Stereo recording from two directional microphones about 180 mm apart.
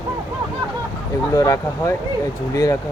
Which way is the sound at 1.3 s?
20° left (ahead or behind).